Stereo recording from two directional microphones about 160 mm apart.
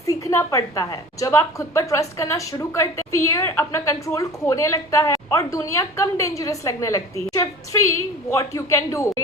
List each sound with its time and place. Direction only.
0.0 s a woman's voice: 20° left (ahead or behind)